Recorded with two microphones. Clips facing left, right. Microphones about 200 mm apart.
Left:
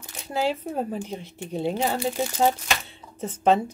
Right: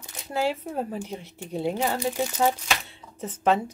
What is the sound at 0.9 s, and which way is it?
Speech, 15° left (ahead or behind).